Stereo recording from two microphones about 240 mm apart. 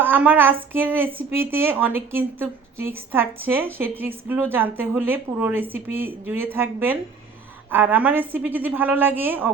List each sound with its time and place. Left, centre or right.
0.0 s speech: centre